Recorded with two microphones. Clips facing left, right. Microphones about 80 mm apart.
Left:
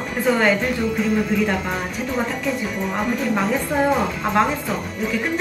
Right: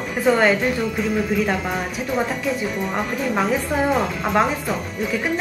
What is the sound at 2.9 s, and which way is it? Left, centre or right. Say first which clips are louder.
A woman's voice: left 3 dB; centre.